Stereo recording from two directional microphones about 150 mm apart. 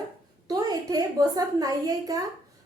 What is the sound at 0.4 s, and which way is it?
A woman's voice, 25° right (ahead or behind).